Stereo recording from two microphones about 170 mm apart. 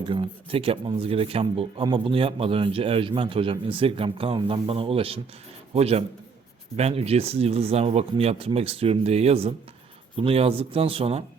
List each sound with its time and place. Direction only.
0.1 s speech: 30° right (ahead or behind)